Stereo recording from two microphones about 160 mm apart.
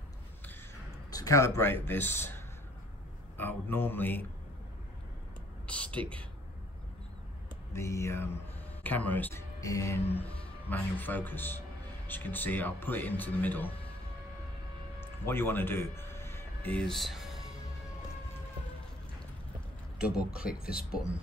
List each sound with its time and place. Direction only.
1.1 s speech: 20° left (ahead or behind)
5.7 s a sound: 10° left (ahead or behind)
7.7 s speech: 20° left (ahead or behind)
15.2 s speech: 15° left (ahead or behind); by 17.4 s centre (ahead or behind)
20.2 s speech: 5° right (ahead or behind)